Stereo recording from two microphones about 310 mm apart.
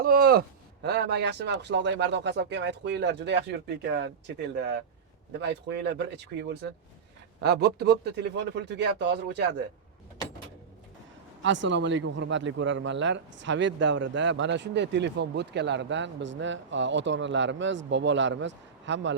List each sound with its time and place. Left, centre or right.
0.0 s speech: right
11.4 s speech: right